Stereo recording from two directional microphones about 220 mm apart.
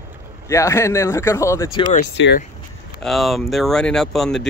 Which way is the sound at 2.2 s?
55° left (ahead or behind).